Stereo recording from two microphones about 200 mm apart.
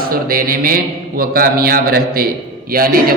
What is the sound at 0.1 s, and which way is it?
A man's voice, 45° right (ahead or behind).